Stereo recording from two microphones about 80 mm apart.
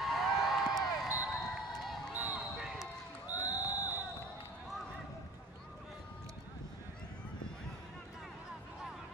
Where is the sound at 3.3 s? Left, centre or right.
Left.